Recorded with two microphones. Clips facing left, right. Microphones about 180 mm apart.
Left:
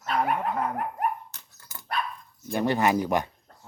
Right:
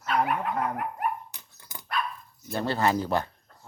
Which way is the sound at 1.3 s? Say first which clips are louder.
Right 1 dB; 15° right (ahead or behind).